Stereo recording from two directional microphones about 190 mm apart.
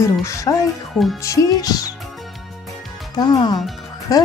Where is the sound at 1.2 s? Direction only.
15° left (ahead or behind).